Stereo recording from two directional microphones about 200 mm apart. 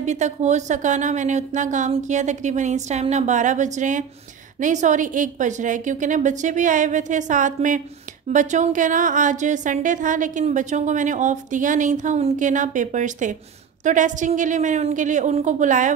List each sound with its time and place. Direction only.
0.0 s a woman's voice: 35° right (ahead or behind)